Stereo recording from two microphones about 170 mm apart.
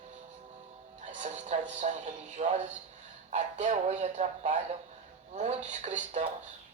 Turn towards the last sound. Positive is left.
turn(degrees=-45)  # may be behind; listen again after turning